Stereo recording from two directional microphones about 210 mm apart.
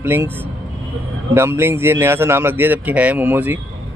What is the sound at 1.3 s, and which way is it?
A man's voice, 10° right (ahead or behind).